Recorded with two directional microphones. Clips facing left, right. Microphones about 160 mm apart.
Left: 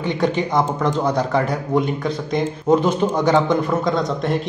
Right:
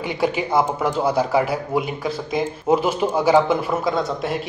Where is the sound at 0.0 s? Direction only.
5° right (ahead or behind).